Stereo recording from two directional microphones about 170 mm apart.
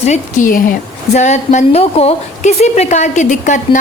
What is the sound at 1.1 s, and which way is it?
A woman's voice, 40° left (ahead or behind).